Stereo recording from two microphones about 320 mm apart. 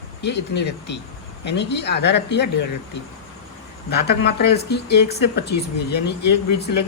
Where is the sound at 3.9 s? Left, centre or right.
Left.